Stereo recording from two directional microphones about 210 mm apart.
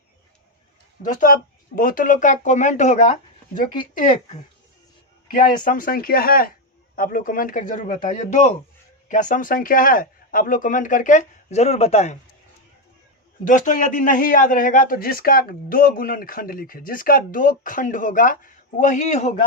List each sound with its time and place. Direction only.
1.0 s a man's voice: 40° left (ahead or behind)
5.6 s a man's voice: 40° left (ahead or behind)
13.4 s a man's voice: 40° left (ahead or behind)